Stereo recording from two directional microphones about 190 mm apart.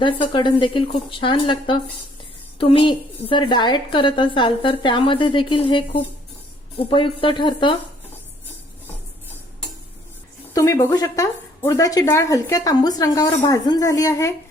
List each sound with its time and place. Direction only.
0.0 s a woman's voice: 25° left (ahead or behind)
10.5 s a woman's voice: 15° left (ahead or behind)